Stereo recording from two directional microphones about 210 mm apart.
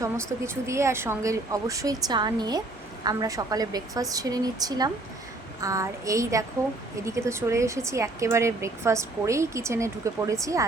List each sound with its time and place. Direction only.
0.0 s speech: 15° right (ahead or behind)